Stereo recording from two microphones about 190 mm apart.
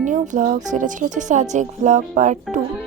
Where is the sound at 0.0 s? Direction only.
40° right (ahead or behind).